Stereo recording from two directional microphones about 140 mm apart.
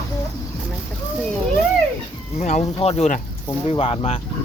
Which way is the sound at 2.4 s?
60° left (ahead or behind).